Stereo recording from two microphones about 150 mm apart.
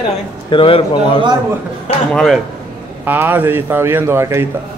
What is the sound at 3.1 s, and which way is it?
Speech, 15° right (ahead or behind).